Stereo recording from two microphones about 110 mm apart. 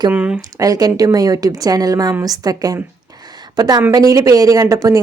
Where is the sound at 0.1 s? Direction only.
10° right (ahead or behind).